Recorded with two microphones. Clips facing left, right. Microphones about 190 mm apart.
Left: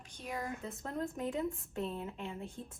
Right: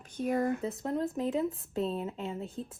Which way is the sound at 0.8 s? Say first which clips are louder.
Right 6 dB; 35° right (ahead or behind).